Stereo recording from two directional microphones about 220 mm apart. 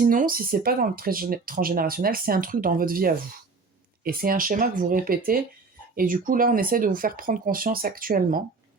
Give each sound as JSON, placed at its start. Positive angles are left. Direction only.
{"t": 0.0, "sound": "speech", "side_deg": -40}